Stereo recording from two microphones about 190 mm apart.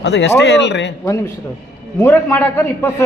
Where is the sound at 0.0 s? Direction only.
65° left (ahead or behind).